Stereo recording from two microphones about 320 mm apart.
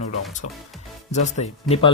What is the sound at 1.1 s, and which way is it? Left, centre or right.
Speech, left.